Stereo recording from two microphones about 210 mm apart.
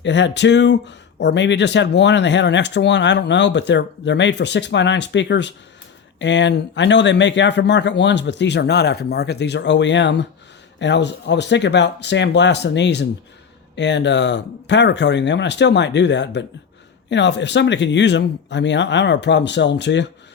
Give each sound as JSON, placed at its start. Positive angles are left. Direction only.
{"t": 0.0, "sound": "speech", "side_deg": 55}